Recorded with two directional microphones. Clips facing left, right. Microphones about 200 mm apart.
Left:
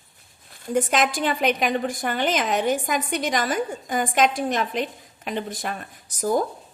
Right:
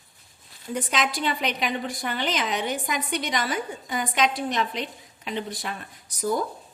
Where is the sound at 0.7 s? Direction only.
50° left (ahead or behind).